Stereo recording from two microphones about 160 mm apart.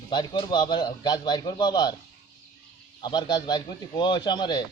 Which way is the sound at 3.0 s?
30° left (ahead or behind).